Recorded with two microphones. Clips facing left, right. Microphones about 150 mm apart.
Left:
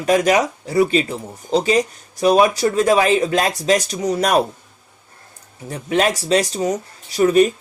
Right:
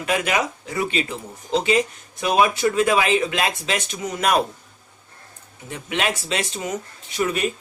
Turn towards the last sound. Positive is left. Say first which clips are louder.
# left 9 dB
turn(degrees=40)  # may be behind; listen again after turning